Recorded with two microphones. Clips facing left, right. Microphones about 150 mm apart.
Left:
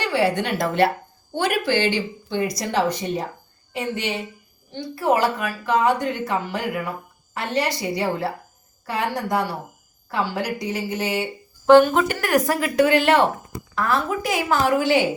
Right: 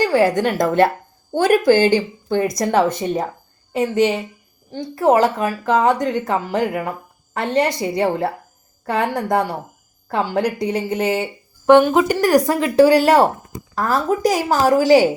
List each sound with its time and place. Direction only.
0.0 s a woman's voice: 45° right (ahead or behind)
10.3 s speech: 55° right (ahead or behind)
10.9 s speech: 30° right (ahead or behind)
11.6 s speech: 10° right (ahead or behind)
12.1 s a woman's voice: 30° right (ahead or behind)